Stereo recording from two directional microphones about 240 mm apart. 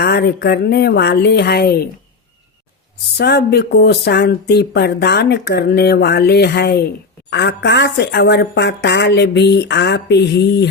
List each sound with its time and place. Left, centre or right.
0.0 s speech: left
3.2 s speech: left